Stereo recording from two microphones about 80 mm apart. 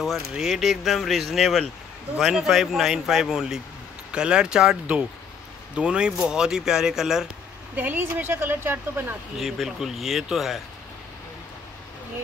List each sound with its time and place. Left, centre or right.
0.3 s speech: centre
7.7 s speech: right
9.4 s speech: centre